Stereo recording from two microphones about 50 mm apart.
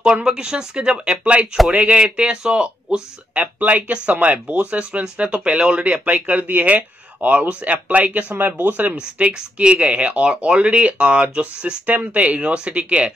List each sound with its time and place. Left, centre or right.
0.0 s speech: centre
3.3 s speech: right
8.9 s speech: right